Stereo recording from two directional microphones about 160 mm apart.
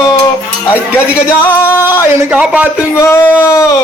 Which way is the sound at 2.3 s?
10° right (ahead or behind).